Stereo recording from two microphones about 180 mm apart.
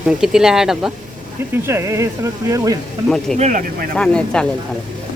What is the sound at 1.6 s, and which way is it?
Speech, 15° right (ahead or behind).